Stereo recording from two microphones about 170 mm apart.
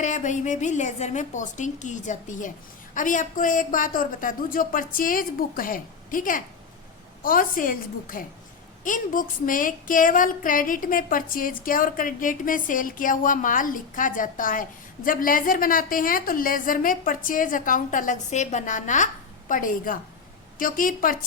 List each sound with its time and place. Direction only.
0.0 s a woman's voice: 45° left (ahead or behind)